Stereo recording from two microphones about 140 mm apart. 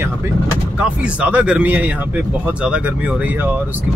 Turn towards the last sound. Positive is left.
turn(degrees=-10)  # may be behind; listen again after turning